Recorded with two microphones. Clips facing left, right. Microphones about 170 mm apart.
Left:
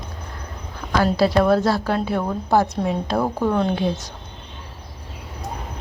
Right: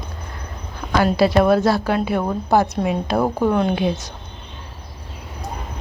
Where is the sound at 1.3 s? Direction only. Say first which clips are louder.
Right 2 dB; 15° right (ahead or behind).